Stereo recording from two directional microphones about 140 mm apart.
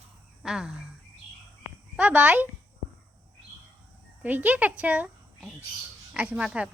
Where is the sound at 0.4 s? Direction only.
5° right (ahead or behind).